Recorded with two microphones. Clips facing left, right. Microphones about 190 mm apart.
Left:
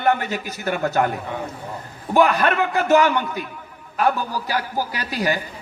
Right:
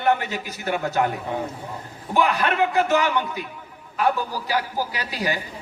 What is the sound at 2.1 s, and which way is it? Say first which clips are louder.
A man's voice: left 3 dB; 50° left (ahead or behind).